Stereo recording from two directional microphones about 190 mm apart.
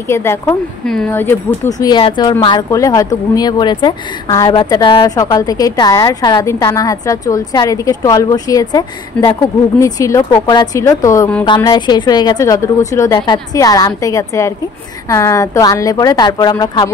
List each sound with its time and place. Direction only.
0.1 s speech: 15° left (ahead or behind)
1.8 s a woman's voice: 25° left (ahead or behind)